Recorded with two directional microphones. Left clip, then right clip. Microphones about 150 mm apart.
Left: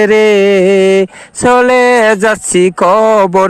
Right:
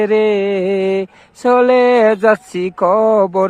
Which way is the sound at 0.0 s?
30° left (ahead or behind).